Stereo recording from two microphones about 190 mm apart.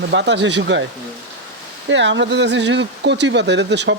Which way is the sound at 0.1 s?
65° right (ahead or behind).